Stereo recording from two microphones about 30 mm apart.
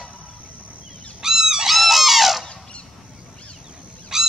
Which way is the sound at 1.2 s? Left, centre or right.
Centre.